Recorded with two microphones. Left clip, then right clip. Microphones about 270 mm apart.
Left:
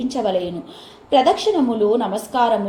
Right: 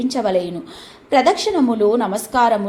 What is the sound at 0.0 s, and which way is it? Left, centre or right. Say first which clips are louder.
A woman's voice: right 2 dB; right.